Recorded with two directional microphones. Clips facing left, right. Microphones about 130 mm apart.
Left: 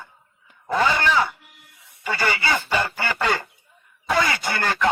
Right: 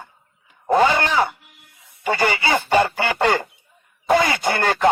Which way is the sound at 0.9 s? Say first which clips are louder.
Right 1 dB; 50° right (ahead or behind).